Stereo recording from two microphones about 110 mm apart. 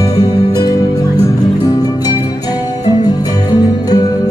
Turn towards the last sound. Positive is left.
turn(degrees=35)  # may be behind; listen again after turning